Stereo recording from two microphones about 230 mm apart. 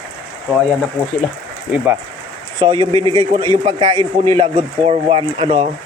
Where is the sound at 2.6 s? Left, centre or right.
Centre.